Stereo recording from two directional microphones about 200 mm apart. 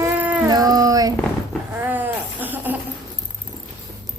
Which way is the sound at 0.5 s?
20° right (ahead or behind).